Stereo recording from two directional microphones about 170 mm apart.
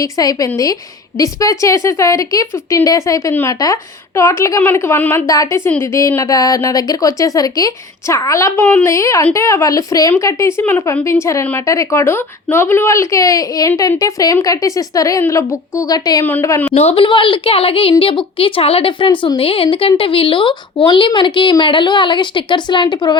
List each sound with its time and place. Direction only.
0.0 s a woman's voice: 20° left (ahead or behind)
16.7 s a woman's voice: 35° left (ahead or behind)